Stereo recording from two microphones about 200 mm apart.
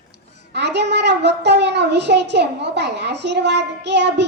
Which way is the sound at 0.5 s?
60° right (ahead or behind).